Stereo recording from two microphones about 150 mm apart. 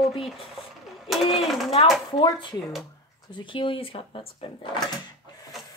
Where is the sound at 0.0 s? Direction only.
Centre (ahead or behind).